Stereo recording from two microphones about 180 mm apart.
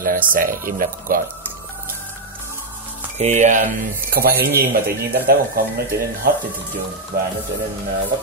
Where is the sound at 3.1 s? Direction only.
40° right (ahead or behind); by 5.4 s 60° right (ahead or behind).